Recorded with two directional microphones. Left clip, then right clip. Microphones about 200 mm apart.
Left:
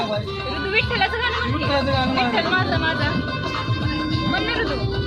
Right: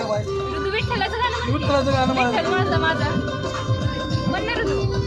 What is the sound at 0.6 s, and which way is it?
Speech, centre (ahead or behind).